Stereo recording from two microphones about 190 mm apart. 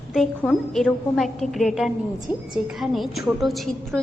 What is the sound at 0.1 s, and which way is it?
A woman's voice, centre (ahead or behind).